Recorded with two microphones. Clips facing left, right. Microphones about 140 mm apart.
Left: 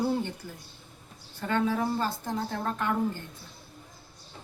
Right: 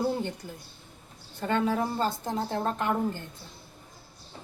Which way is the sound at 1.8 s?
20° right (ahead or behind).